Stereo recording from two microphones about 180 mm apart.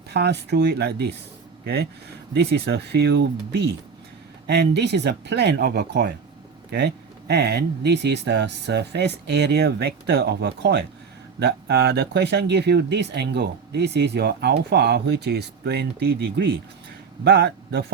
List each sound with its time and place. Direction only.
0.1 s speech: 70° right (ahead or behind)